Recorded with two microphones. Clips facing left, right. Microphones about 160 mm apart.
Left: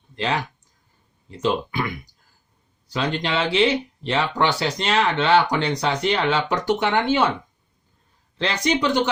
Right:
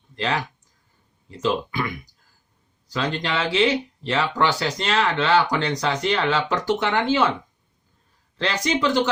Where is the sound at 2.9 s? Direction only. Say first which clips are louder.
Left 1 dB; 20° left (ahead or behind).